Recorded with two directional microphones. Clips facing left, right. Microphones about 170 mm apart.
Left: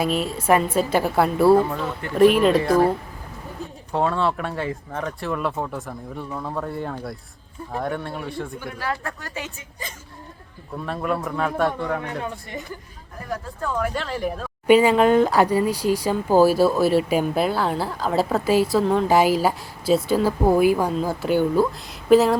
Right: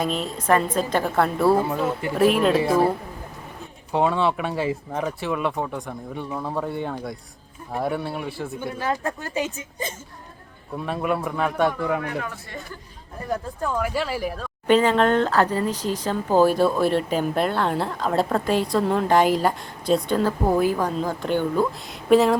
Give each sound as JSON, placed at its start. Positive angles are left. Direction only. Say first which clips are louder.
{"t": 0.0, "sound": "speech", "louder": "left 3 dB", "side_deg": 5}
{"t": 3.9, "sound": "speech", "louder": "right 1 dB", "side_deg": -5}
{"t": 8.6, "sound": "speech", "louder": "right 7 dB", "side_deg": -25}
{"t": 10.8, "sound": "speech", "louder": "right 1 dB", "side_deg": -5}
{"t": 12.2, "sound": "speech", "louder": "left 3 dB", "side_deg": 20}
{"t": 13.7, "sound": "speech", "louder": "even", "side_deg": -5}